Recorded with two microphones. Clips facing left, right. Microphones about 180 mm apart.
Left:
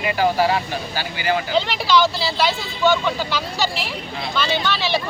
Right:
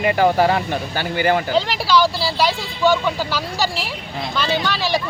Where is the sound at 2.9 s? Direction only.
10° right (ahead or behind).